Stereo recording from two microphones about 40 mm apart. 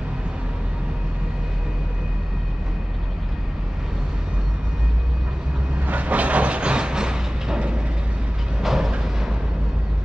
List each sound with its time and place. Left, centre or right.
5.8 s vehicle: right; by 7.6 s centre
8.6 s vehicle: centre